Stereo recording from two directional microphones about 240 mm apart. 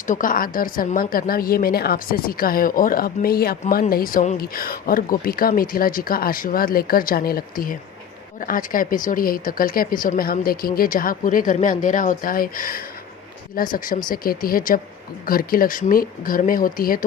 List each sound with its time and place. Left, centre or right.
0.1 s a woman's voice: left